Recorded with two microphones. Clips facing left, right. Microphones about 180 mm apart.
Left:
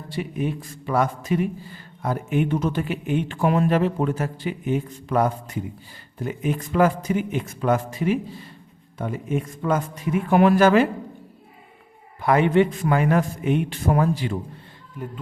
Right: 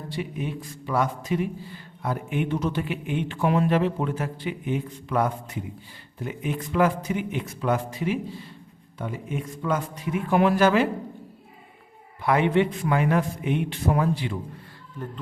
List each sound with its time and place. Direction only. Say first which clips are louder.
0.1 s a man's voice: left 5 dB; 45° left (ahead or behind)
12.2 s a man's voice: left 3 dB; 45° left (ahead or behind)
15.0 s speech: left 2 dB; 10° left (ahead or behind)